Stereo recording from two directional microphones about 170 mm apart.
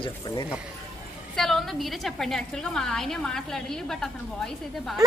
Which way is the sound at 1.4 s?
Centre (ahead or behind).